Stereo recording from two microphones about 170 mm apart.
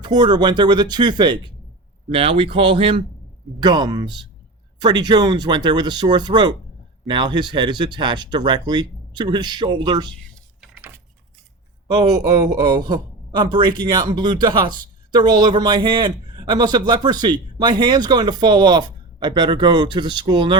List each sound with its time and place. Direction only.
0.0 s speech: 25° right (ahead or behind)
10.6 s a sound: 10° right (ahead or behind)
11.9 s speech: 20° right (ahead or behind)